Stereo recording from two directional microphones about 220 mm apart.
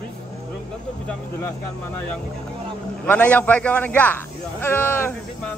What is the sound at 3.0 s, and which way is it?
A man's voice, 5° left (ahead or behind).